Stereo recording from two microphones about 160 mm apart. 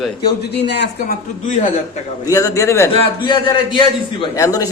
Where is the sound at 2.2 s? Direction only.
20° left (ahead or behind).